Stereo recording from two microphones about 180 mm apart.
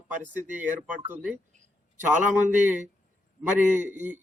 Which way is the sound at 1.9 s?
45° right (ahead or behind).